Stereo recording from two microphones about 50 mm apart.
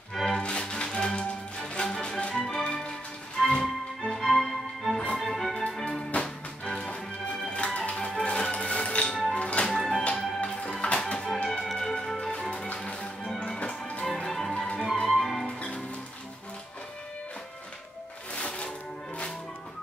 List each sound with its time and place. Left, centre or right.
0.1 s music: centre
5.8 s music: centre
7.9 s music: centre
9.7 s music: centre
11.6 s music: centre
13.6 s music: left
14.0 s music: centre
15.0 s music: centre
15.4 s music: left
18.3 s music: left